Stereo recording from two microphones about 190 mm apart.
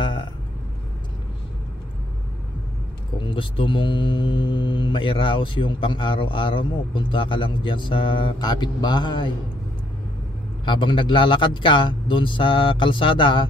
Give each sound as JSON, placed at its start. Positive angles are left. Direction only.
{"t": 0.0, "sound": "vehicle", "side_deg": 25}
{"t": 3.2, "sound": "speech", "side_deg": 25}
{"t": 10.6, "sound": "speech", "side_deg": 25}